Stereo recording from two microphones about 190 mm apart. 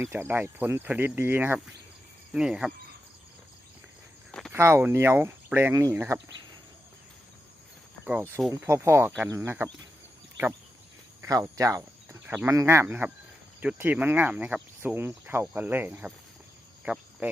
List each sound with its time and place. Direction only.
0.0 s speech: 10° right (ahead or behind)
2.3 s cricket: 5° right (ahead or behind)
4.3 s a sound: centre (ahead or behind)
4.5 s speech: 15° right (ahead or behind)
8.4 s cricket: centre (ahead or behind)
8.7 s speech: 15° right (ahead or behind)
11.2 s speech: 15° right (ahead or behind)
16.8 s cricket: 5° right (ahead or behind)